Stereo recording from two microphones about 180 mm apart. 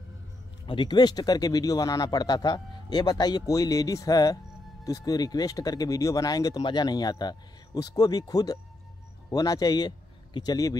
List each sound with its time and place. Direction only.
0.7 s speech: 25° left (ahead or behind)